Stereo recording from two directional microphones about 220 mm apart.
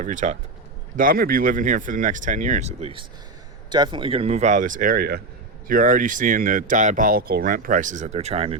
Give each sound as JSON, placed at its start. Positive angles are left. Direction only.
{"t": 0.0, "sound": "speech", "side_deg": -35}